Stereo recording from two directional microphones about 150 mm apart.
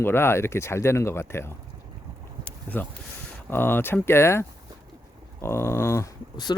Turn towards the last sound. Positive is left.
turn(degrees=25)  # may be behind; listen again after turning